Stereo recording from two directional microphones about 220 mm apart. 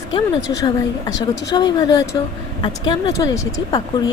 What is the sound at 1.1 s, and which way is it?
Speech, 50° left (ahead or behind).